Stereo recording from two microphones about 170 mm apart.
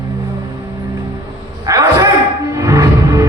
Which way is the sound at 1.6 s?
20° right (ahead or behind).